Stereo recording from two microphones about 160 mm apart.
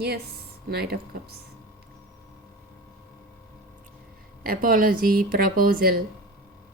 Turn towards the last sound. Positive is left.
turn(degrees=-65)  # may be behind; listen again after turning